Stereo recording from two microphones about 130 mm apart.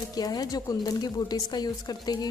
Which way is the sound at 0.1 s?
30° left (ahead or behind).